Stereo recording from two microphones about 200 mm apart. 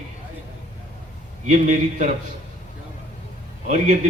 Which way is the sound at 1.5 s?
40° right (ahead or behind).